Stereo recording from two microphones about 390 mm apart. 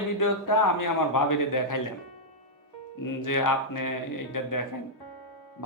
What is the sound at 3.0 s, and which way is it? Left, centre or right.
Speech, left.